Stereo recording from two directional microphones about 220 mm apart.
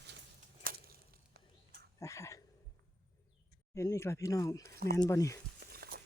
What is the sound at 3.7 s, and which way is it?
Speech, 10° left (ahead or behind).